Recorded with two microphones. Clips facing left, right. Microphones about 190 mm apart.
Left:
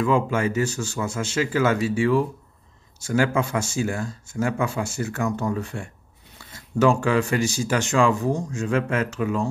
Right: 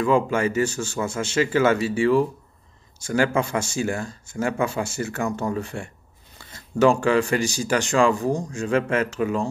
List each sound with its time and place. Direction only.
0.0 s speech: 5° left (ahead or behind)